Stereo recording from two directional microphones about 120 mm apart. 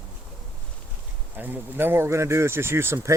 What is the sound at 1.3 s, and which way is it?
Speech, 15° right (ahead or behind).